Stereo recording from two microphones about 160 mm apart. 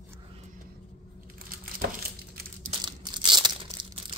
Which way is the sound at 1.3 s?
65° right (ahead or behind).